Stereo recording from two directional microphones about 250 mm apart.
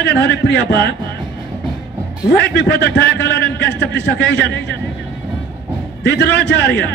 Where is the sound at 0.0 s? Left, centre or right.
Left.